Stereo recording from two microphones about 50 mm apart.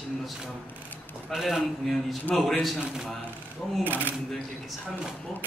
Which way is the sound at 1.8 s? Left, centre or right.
Centre.